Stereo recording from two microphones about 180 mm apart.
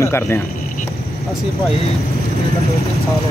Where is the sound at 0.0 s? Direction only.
15° left (ahead or behind).